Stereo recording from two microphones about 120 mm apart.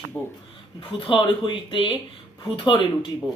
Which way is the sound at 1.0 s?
45° left (ahead or behind).